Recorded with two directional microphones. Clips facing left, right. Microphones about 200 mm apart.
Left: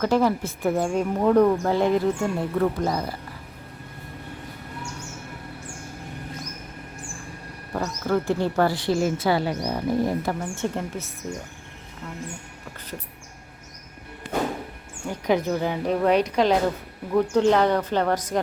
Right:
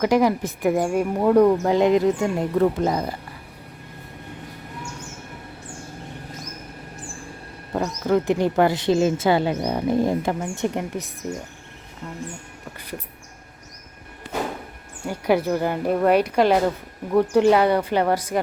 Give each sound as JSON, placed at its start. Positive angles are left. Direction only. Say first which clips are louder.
{"t": 0.0, "sound": "speech", "louder": "right 2 dB", "side_deg": -15}
{"t": 7.7, "sound": "speech", "louder": "right 3 dB", "side_deg": -20}
{"t": 15.0, "sound": "speech", "louder": "right 2 dB", "side_deg": -10}